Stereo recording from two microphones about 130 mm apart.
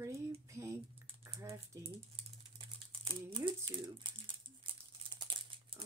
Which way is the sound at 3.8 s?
40° right (ahead or behind).